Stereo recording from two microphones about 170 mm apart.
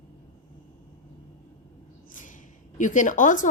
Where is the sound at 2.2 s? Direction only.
50° left (ahead or behind).